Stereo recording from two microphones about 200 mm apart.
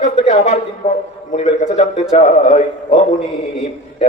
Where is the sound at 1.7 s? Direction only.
35° left (ahead or behind).